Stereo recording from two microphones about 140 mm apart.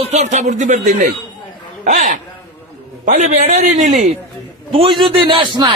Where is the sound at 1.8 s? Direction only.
65° right (ahead or behind).